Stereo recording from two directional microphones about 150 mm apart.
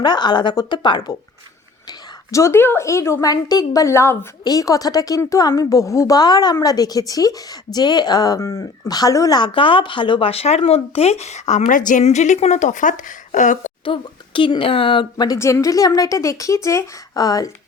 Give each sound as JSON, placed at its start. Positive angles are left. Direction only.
{"t": 0.0, "sound": "a woman's voice", "side_deg": 30}
{"t": 1.9, "sound": "a woman's voice", "side_deg": 20}
{"t": 13.8, "sound": "a woman's voice", "side_deg": 35}